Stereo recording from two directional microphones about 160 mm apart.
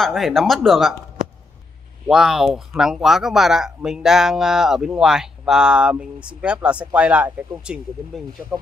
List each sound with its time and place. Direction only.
0.0 s speech: centre (ahead or behind)
2.0 s speech: 5° right (ahead or behind)